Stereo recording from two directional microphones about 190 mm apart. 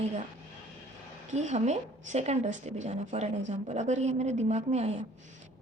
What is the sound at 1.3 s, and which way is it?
A woman's voice, 35° right (ahead or behind).